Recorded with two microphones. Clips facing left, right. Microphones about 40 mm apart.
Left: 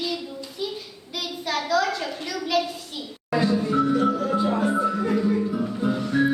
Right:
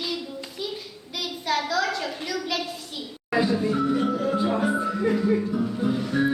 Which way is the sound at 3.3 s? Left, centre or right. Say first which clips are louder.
Left 1 dB; centre.